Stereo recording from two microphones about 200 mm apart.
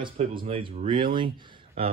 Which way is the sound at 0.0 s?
25° right (ahead or behind).